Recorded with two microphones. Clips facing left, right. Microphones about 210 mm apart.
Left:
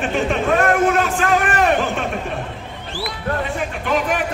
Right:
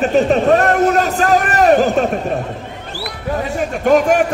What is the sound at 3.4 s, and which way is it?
Speech, 40° right (ahead or behind).